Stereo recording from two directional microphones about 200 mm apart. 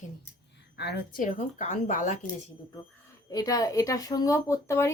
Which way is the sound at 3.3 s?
20° left (ahead or behind).